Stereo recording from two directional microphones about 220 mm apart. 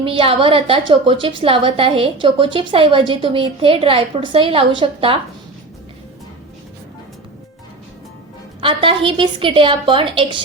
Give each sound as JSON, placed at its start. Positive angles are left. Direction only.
{"t": 0.0, "sound": "a woman's voice", "side_deg": -25}
{"t": 8.6, "sound": "a woman's voice", "side_deg": -25}